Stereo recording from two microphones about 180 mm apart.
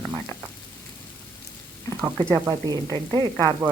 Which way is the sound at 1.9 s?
20° right (ahead or behind).